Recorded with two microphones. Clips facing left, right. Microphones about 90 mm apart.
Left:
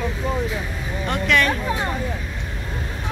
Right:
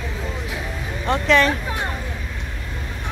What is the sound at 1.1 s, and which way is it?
Speech, 30° right (ahead or behind).